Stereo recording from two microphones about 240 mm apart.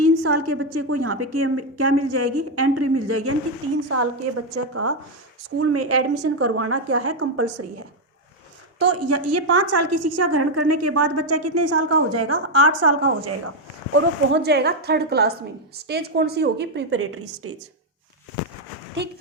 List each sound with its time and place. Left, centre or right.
0.0 s a woman's voice: right
3.8 s a woman's voice: right
8.8 s a woman's voice: right
13.9 s a woman's voice: right
19.0 s a woman's voice: right